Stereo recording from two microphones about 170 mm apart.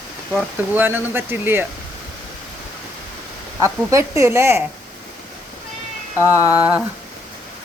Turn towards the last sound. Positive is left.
turn(degrees=-10)  # may be behind; listen again after turning